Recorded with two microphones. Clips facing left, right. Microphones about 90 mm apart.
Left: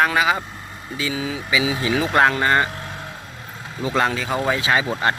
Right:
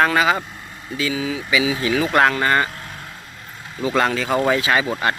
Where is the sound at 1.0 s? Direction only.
25° left (ahead or behind).